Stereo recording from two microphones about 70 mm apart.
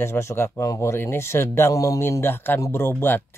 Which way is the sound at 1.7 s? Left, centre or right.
Left.